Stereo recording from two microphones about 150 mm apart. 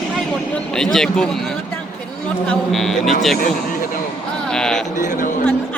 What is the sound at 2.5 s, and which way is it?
Speech, centre (ahead or behind).